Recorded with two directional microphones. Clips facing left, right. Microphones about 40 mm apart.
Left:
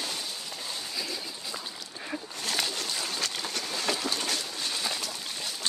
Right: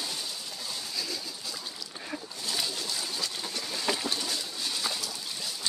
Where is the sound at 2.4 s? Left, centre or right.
Left.